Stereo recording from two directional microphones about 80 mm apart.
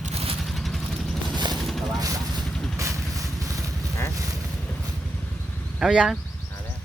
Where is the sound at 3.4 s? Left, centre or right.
Right.